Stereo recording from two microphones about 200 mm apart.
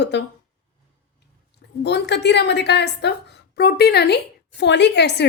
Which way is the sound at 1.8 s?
60° left (ahead or behind).